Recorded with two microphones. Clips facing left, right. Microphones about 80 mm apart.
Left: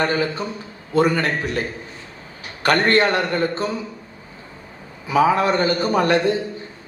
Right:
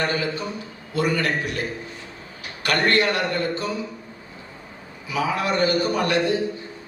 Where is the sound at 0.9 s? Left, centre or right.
Left.